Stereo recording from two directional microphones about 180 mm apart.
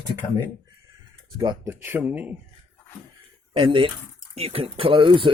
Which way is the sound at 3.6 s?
30° right (ahead or behind).